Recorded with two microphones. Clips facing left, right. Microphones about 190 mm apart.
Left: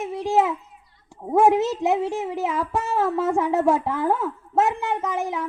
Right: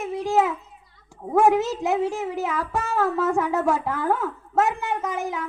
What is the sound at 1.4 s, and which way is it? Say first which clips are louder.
Speech: left 1 dB; 25° left (ahead or behind).